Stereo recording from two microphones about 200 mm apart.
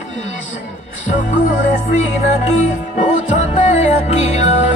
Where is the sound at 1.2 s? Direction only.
40° left (ahead or behind).